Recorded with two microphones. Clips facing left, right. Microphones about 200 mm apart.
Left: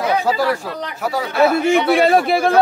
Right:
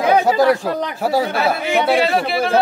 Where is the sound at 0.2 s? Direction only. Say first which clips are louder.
Right 4 dB; 20° right (ahead or behind).